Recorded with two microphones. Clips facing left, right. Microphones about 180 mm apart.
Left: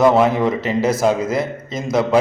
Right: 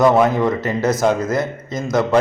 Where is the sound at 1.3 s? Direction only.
30° left (ahead or behind).